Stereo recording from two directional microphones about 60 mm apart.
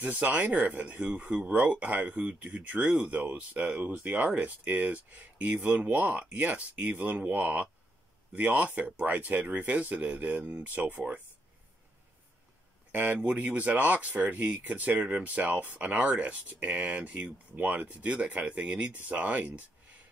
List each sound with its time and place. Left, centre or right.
0.0 s speech: right
12.9 s speech: right